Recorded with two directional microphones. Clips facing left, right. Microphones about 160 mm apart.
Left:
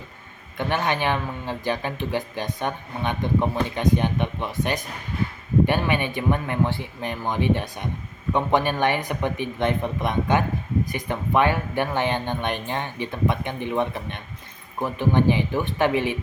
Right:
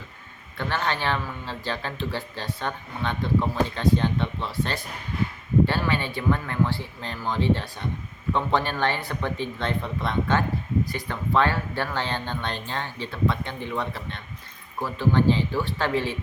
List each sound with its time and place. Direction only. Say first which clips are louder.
0.5 s a man's voice: left 3 dB; 15° left (ahead or behind)